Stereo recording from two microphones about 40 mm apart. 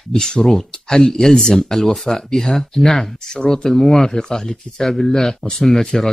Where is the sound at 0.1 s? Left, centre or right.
Centre.